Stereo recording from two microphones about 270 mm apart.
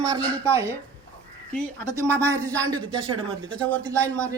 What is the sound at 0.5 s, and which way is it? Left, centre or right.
Speech, centre.